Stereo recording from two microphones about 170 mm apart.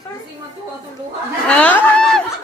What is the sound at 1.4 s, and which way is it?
Speech, 5° left (ahead or behind).